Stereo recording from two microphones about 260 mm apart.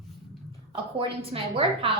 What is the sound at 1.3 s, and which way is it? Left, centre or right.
Speech, right.